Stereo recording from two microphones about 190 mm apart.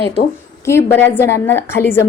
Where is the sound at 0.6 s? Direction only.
15° left (ahead or behind).